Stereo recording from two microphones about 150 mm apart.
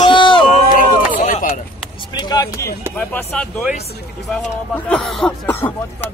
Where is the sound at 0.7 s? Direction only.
60° left (ahead or behind).